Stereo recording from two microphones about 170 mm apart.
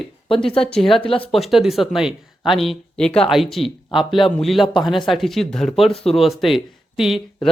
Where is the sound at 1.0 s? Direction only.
35° left (ahead or behind).